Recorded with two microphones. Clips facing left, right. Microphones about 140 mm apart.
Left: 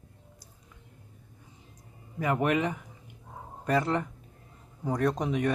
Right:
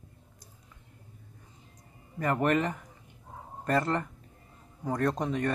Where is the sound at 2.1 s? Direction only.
5° left (ahead or behind).